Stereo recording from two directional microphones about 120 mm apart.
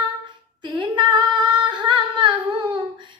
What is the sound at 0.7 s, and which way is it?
Female singing, 40° right (ahead or behind).